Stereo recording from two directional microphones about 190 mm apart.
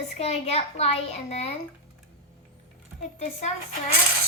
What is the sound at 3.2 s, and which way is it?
Speech, 35° left (ahead or behind).